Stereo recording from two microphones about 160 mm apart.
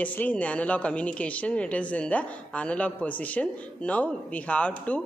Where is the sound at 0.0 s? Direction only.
10° left (ahead or behind).